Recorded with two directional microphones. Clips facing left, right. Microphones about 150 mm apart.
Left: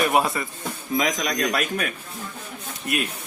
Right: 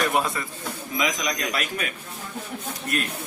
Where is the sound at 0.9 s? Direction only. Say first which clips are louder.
Left 3 dB; 50° left (ahead or behind).